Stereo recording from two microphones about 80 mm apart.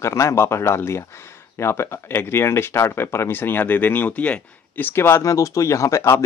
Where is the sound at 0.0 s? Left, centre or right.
Left.